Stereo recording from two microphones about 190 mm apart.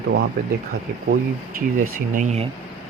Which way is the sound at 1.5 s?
45° right (ahead or behind).